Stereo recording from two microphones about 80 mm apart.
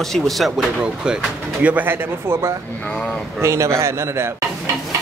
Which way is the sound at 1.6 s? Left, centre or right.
Right.